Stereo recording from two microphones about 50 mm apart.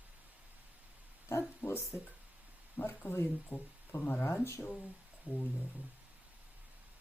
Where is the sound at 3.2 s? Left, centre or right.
Left.